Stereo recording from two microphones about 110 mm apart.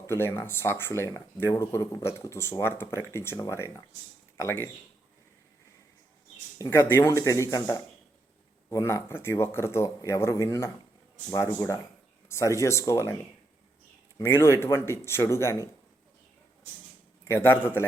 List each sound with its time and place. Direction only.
0.1 s speech: 20° left (ahead or behind)
6.7 s speech: 20° left (ahead or behind)
8.7 s speech: 25° left (ahead or behind)
14.2 s speech: 20° left (ahead or behind)
17.2 s speech: 20° left (ahead or behind)